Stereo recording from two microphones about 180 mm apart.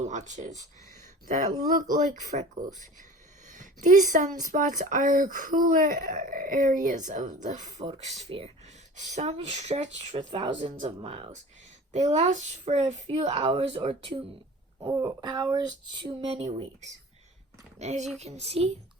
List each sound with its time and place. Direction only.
0.0 s speech: 45° right (ahead or behind)
10.2 s speech: 25° right (ahead or behind)
14.8 s speech: 20° right (ahead or behind); by 16.6 s 35° right (ahead or behind)
17.7 s speech: 40° right (ahead or behind)